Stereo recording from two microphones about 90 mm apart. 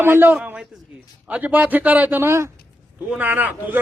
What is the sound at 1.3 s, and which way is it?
A man's voice, 15° right (ahead or behind).